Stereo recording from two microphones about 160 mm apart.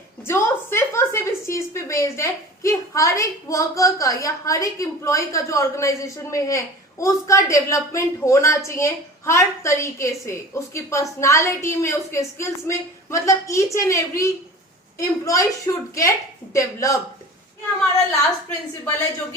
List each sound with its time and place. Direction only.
0.3 s a woman's voice: 15° left (ahead or behind)